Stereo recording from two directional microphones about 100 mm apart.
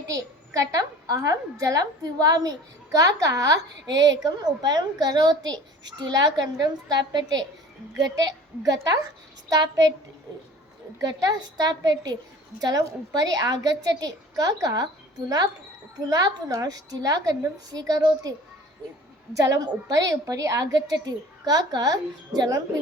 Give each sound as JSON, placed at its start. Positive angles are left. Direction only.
{"t": 0.1, "sound": "a child's voice", "side_deg": -35}
{"t": 11.0, "sound": "a child's voice", "side_deg": -40}
{"t": 16.0, "sound": "a child's voice", "side_deg": -40}